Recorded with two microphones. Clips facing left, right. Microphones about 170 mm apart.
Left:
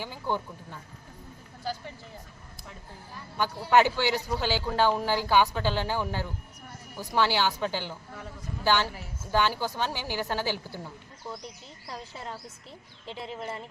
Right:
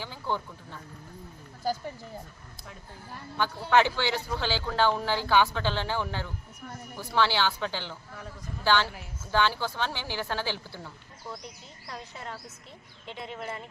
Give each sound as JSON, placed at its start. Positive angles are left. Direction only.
{"t": 0.0, "sound": "speech", "side_deg": 15}
{"t": 3.7, "sound": "speech", "side_deg": 10}
{"t": 12.1, "sound": "a woman's voice", "side_deg": 30}